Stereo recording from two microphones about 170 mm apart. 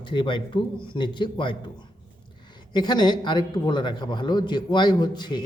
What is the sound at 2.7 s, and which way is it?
A man's voice, 25° left (ahead or behind).